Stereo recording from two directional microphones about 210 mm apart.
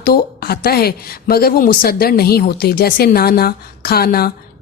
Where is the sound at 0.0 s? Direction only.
45° left (ahead or behind).